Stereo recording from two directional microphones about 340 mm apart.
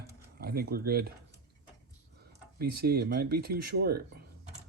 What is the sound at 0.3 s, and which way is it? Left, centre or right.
Speech, right.